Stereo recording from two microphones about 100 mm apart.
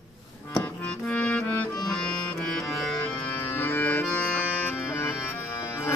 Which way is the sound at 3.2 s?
20° left (ahead or behind).